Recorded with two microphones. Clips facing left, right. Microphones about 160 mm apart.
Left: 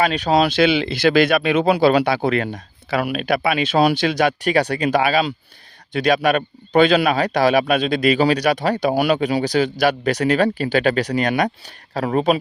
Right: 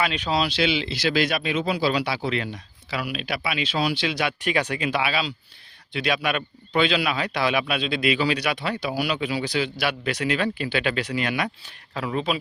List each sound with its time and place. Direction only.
0.0 s a man's voice: 45° left (ahead or behind)